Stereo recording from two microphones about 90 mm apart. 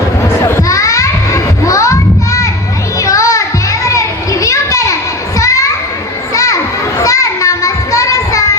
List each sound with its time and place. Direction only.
0.4 s children playing: 35° left (ahead or behind)